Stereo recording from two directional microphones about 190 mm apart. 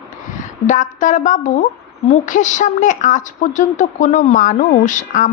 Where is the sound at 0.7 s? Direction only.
40° left (ahead or behind).